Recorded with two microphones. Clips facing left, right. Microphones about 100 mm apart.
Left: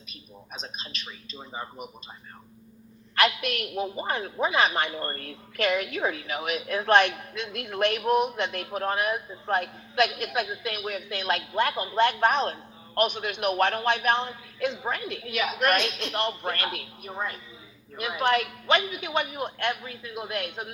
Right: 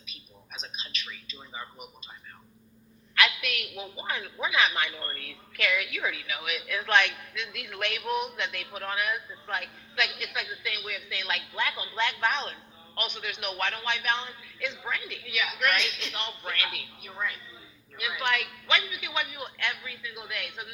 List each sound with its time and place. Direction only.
0.0 s a woman's voice: 40° left (ahead or behind)
3.2 s a woman's voice: 40° left (ahead or behind)